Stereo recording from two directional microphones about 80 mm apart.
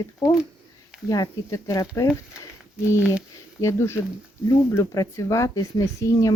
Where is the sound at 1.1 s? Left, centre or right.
Left.